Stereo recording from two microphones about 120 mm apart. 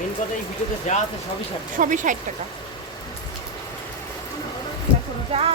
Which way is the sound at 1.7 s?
90° right.